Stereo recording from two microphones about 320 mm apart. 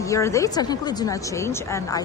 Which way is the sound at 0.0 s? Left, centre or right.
Centre.